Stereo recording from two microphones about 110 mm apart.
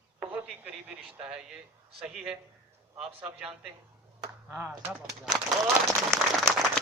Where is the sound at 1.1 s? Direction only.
5° right (ahead or behind).